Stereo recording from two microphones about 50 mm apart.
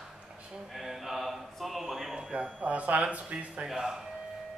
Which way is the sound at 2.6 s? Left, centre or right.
Right.